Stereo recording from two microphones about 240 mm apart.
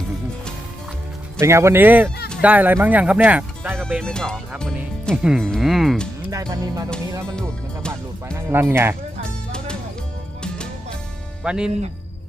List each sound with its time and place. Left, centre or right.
1.4 s speech: centre
6.3 s speech: centre
7.3 s music: centre
8.4 s speech: centre
11.4 s speech: centre